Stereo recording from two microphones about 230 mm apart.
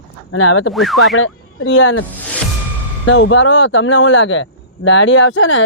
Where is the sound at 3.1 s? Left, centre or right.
Left.